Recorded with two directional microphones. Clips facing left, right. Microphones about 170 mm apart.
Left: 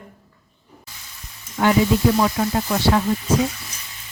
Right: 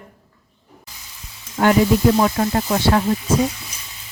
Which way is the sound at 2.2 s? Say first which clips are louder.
Right 2 dB; 45° right (ahead or behind).